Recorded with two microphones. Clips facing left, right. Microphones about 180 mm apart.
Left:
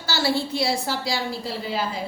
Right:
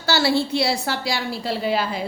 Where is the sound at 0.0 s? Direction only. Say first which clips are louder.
Right 4 dB; 70° right (ahead or behind).